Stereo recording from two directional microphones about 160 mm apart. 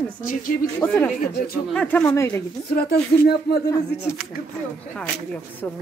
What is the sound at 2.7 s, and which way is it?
Speech, 85° left.